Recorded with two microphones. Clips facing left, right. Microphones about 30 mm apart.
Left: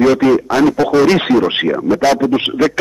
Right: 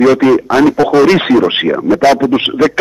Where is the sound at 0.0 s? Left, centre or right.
Centre.